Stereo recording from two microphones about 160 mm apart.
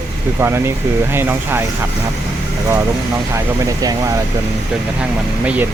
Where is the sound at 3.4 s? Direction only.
20° right (ahead or behind).